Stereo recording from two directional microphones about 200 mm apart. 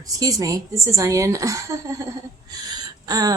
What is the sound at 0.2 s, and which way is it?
Speech, 15° right (ahead or behind).